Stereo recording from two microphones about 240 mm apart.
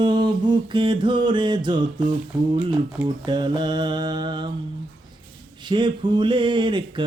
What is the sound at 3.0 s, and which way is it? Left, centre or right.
Mantra, centre.